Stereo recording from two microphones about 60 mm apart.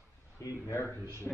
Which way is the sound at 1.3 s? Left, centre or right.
Left.